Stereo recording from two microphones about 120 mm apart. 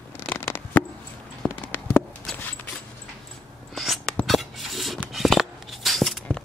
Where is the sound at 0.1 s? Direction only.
20° left (ahead or behind).